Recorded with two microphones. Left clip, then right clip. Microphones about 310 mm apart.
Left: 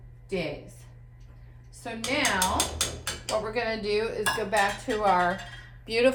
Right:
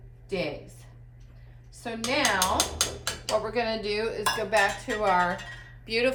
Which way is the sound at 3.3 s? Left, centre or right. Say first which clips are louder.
Right 1 dB; centre.